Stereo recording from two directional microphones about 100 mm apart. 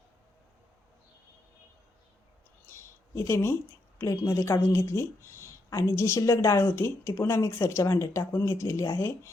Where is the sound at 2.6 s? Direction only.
30° left (ahead or behind).